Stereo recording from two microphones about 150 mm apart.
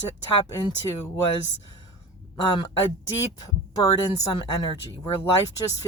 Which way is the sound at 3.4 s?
25° left (ahead or behind).